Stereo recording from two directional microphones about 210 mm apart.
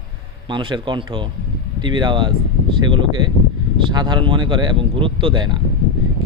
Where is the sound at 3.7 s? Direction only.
20° right (ahead or behind).